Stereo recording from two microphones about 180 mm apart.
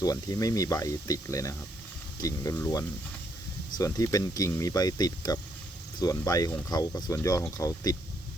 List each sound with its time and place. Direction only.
0.0 s speech: 20° left (ahead or behind)